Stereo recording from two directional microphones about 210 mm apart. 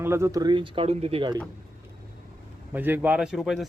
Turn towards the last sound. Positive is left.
turn(degrees=0)  # may be behind; listen again after turning